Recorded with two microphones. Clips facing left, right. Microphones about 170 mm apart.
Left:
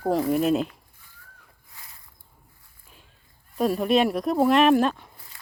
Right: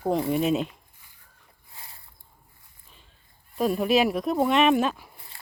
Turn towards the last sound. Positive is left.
turn(degrees=-5)  # may be behind; listen again after turning